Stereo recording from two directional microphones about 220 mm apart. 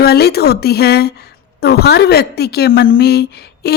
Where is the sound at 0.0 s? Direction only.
45° left (ahead or behind).